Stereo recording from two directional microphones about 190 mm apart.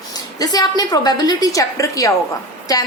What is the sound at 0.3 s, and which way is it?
A woman's voice, 20° left (ahead or behind).